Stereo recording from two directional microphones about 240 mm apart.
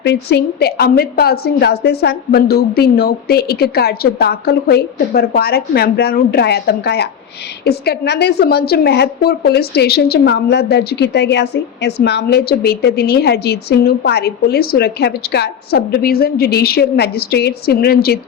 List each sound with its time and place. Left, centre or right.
0.0 s a woman's voice: left